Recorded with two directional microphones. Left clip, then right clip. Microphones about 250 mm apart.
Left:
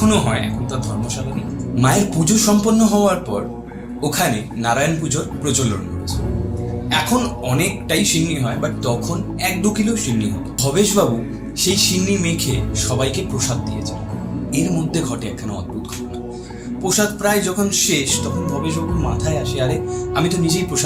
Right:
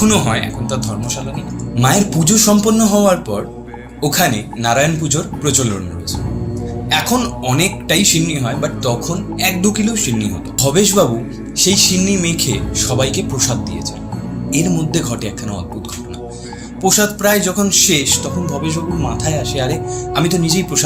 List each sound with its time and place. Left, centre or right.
0.0 s speech: right
1.8 s speech: right
6.9 s speech: right
14.5 s speech: right
16.8 s speech: right
19.2 s speech: right